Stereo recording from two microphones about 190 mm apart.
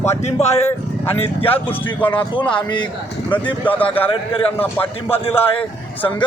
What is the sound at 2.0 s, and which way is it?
A man's voice, 25° left (ahead or behind).